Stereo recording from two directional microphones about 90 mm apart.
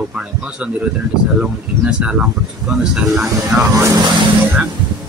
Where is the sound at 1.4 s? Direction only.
10° right (ahead or behind).